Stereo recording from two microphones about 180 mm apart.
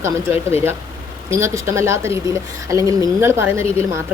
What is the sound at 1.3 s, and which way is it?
Speech, 15° right (ahead or behind).